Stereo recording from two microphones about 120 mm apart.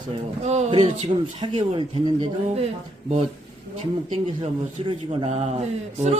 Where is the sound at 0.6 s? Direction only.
55° right (ahead or behind).